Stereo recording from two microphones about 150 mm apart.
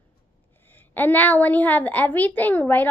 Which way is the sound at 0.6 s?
15° left (ahead or behind).